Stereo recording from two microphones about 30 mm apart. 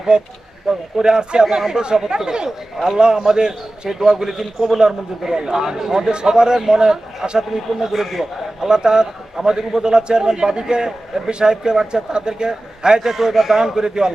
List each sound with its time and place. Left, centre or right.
0.1 s a man's voice: right
0.7 s a man's voice: centre
6.1 s a man's voice: right; by 8.3 s centre
8.6 s a man's voice: right
13.0 s a man's voice: centre
13.3 s a man's voice: centre
13.6 s a man's voice: right